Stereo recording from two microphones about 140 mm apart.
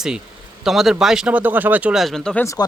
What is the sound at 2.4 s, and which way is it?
Speech, 20° left (ahead or behind).